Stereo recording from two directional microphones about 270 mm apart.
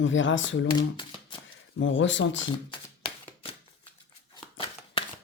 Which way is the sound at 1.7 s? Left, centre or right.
Left.